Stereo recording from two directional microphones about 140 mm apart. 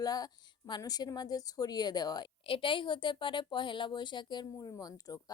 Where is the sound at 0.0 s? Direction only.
25° left (ahead or behind).